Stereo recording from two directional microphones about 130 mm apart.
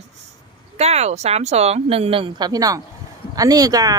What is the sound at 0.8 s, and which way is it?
A woman's voice, 55° right (ahead or behind).